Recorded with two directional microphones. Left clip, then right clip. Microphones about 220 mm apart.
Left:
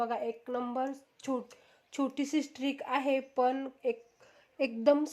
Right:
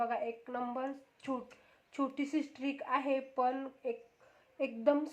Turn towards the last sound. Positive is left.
turn(degrees=45)  # may be behind; listen again after turning